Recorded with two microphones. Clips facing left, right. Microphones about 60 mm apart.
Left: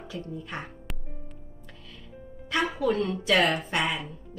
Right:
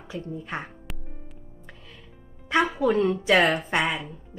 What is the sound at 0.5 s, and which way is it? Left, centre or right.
Speech, right.